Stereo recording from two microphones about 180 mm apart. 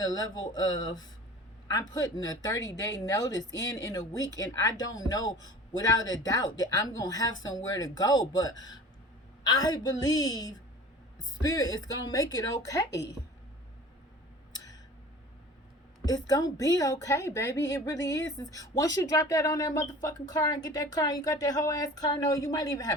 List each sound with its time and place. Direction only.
0.0 s speech: 20° left (ahead or behind)
12.9 s a woman's voice: 75° left (ahead or behind)
16.0 s speech: 20° left (ahead or behind)